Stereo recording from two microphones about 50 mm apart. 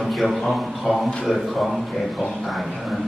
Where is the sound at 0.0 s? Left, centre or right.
Centre.